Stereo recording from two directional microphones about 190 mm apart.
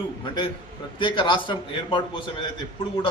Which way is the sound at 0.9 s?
25° left (ahead or behind).